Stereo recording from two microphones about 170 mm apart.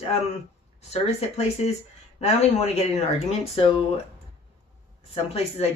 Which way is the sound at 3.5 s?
35° left (ahead or behind).